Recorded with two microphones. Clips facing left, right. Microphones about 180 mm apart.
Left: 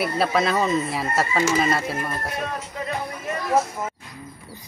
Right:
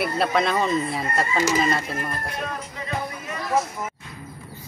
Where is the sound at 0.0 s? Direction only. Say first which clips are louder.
Left 1 dB; 5° left (ahead or behind).